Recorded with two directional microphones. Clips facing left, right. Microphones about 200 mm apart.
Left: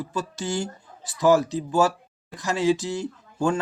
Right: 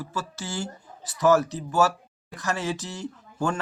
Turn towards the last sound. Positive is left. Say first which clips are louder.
# left 4 dB
turn(degrees=10)  # may be behind; listen again after turning